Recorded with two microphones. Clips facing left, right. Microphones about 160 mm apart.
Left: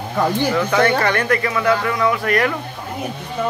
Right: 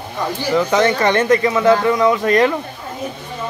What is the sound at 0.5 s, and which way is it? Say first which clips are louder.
Speech: right 6 dB; 20° right (ahead or behind).